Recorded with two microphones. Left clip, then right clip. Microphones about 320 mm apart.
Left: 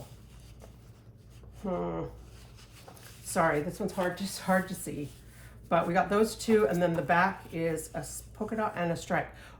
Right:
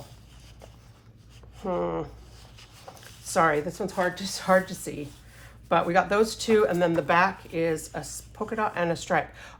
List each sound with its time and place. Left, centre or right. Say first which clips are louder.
1.6 s speech: right 5 dB; centre
3.3 s speech: right 5 dB; centre